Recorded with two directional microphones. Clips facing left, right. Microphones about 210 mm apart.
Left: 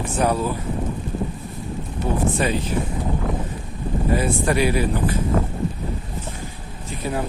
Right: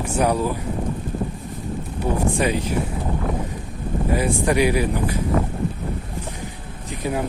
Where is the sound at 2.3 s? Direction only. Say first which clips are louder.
Right 1 dB; 15° right (ahead or behind).